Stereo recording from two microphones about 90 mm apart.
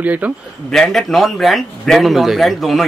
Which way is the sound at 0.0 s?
20° right (ahead or behind).